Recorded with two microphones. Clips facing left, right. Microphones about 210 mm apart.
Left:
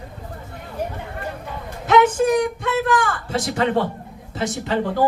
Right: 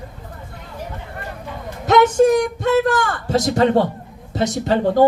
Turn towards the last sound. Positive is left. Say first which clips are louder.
# right 5 dB
turn(degrees=-40)  # may be behind; listen again after turning